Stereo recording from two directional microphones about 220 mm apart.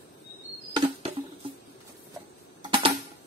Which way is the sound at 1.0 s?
25° right (ahead or behind).